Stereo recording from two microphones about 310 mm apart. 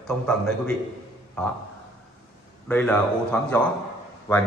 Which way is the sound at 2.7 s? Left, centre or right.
Centre.